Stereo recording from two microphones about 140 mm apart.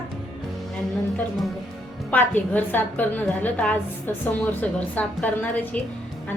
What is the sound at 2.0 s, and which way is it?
A woman's voice, 10° left (ahead or behind).